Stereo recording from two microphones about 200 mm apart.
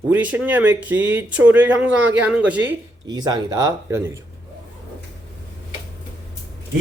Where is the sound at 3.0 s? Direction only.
20° right (ahead or behind).